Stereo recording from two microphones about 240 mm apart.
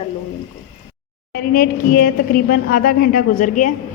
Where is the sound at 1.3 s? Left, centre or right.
Left.